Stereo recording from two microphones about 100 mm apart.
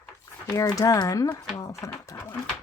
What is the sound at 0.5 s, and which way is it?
Speech, 35° left (ahead or behind).